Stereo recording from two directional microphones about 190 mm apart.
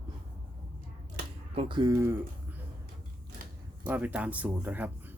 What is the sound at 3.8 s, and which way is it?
Speech, 10° right (ahead or behind).